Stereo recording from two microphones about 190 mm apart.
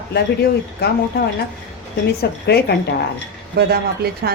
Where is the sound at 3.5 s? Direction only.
55° right (ahead or behind).